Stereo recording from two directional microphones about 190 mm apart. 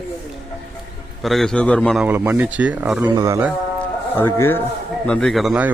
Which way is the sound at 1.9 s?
10° right (ahead or behind).